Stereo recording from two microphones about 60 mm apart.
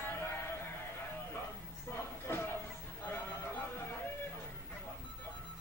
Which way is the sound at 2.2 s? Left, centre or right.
Left.